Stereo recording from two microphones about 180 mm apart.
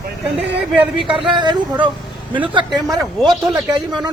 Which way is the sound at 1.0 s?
25° right (ahead or behind).